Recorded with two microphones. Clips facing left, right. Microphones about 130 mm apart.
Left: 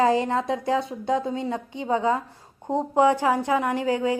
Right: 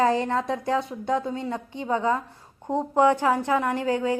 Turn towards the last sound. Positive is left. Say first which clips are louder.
# left 1 dB
turn(degrees=20)  # may be behind; listen again after turning